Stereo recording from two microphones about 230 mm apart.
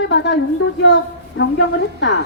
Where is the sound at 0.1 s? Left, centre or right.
Left.